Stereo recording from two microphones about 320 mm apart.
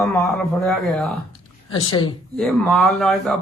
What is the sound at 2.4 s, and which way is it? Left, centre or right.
A man's voice, centre.